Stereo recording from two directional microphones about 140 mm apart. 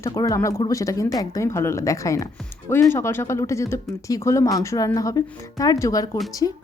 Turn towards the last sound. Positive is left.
turn(degrees=30)  # may be behind; listen again after turning